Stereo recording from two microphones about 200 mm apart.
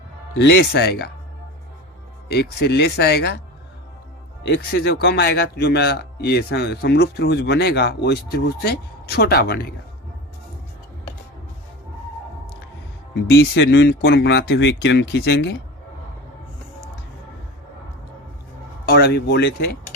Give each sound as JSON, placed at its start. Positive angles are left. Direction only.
{"t": 0.3, "sound": "speech", "side_deg": 60}
{"t": 2.3, "sound": "speech", "side_deg": 55}
{"t": 4.4, "sound": "speech", "side_deg": 55}
{"t": 13.2, "sound": "speech", "side_deg": 55}
{"t": 18.9, "sound": "speech", "side_deg": 50}